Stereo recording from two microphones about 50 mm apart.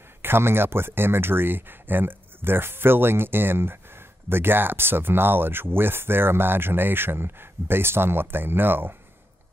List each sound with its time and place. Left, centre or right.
0.2 s speech: right